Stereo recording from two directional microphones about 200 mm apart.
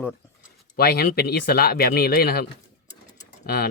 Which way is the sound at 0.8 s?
50° left (ahead or behind).